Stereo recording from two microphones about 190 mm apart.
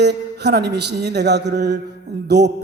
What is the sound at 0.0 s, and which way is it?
A man's voice, 60° right (ahead or behind).